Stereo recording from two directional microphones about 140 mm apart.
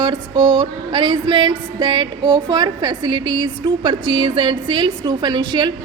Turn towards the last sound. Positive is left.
turn(degrees=-30)  # may be behind; listen again after turning